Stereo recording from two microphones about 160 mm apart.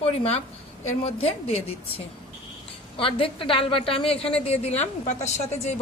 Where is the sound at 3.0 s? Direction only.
35° left (ahead or behind).